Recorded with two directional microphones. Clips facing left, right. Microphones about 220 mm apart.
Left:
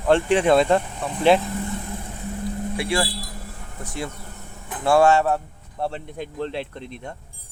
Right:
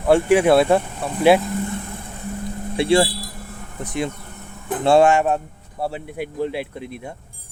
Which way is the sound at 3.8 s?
20° right (ahead or behind).